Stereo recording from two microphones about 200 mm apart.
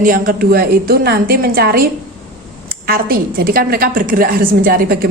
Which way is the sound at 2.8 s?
50° right (ahead or behind).